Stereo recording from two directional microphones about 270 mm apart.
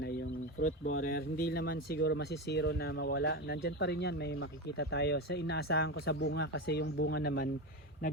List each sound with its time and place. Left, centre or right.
0.6 s speech: left
1.0 s speech: left